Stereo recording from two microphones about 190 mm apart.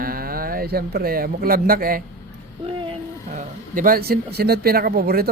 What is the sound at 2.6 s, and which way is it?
Speech, 35° right (ahead or behind).